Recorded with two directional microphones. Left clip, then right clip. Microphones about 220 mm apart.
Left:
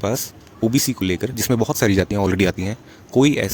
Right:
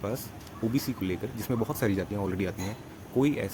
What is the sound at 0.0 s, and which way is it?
Speech, 45° left (ahead or behind).